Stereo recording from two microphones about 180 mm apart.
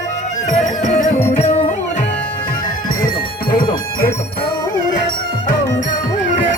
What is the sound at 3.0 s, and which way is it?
Music, 55° left (ahead or behind).